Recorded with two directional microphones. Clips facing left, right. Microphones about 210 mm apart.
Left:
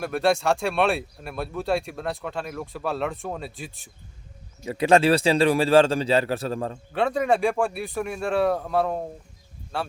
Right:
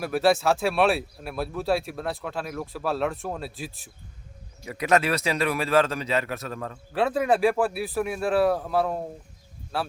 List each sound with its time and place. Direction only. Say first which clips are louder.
0.0 s speech: right 1 dB; centre (ahead or behind)
4.6 s a man's voice: left 5 dB; 30° left (ahead or behind)
6.9 s speech: even; centre (ahead or behind)